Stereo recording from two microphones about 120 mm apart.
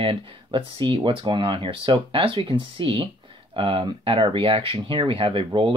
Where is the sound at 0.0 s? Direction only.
50° right (ahead or behind).